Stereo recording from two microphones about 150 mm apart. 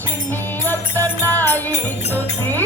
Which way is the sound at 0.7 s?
15° left (ahead or behind).